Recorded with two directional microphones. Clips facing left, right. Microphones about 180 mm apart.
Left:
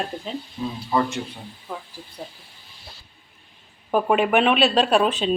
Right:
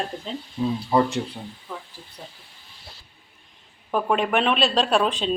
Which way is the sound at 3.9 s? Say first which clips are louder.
Left 3 dB; 5° left (ahead or behind).